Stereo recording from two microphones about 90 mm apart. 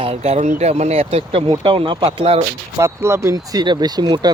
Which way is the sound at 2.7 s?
30° right (ahead or behind).